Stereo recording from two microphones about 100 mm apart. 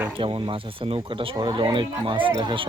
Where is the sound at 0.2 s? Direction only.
65° right (ahead or behind).